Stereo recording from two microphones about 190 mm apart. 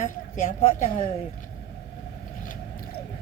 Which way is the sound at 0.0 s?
40° left (ahead or behind).